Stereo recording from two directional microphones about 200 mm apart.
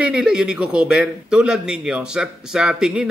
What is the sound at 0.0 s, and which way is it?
A man's voice, 5° right (ahead or behind).